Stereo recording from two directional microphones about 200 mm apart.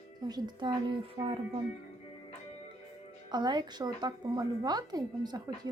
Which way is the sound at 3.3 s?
20° right (ahead or behind).